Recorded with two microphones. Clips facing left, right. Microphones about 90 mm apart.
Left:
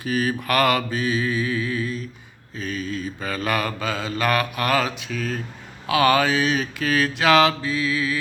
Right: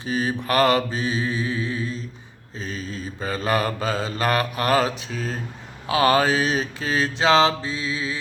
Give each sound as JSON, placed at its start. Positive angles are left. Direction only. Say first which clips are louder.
{"t": 0.0, "sound": "mantra", "louder": "left 1 dB", "side_deg": -30}